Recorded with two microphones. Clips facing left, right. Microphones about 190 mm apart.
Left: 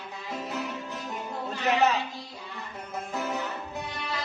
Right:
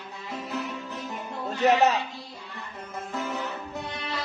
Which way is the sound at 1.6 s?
40° right (ahead or behind).